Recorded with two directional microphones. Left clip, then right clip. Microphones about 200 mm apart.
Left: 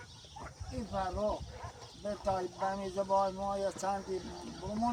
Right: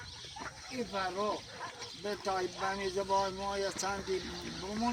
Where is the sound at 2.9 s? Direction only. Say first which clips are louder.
Left 3 dB; 10° left (ahead or behind).